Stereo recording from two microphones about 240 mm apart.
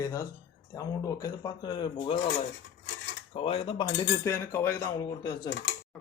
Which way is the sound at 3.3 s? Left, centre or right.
Left.